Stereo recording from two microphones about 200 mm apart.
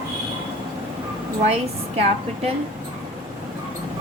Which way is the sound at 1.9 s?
30° right (ahead or behind).